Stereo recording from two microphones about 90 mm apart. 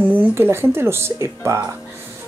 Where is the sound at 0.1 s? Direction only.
25° right (ahead or behind).